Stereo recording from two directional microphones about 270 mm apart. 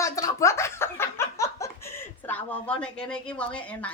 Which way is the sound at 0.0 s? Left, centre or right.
Centre.